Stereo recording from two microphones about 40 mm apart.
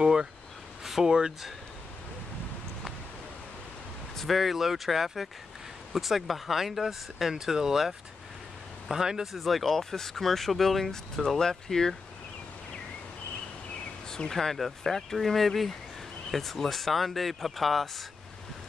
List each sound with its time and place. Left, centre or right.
0.0 s a sound: right
1.0 s speech: centre
4.2 s speech: centre
9.4 s speech: centre
14.3 s speech: centre